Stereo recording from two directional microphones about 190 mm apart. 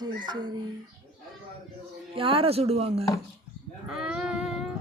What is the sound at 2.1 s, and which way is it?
Speech, 30° right (ahead or behind).